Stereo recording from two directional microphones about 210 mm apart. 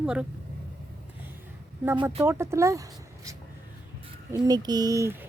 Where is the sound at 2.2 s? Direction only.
10° right (ahead or behind).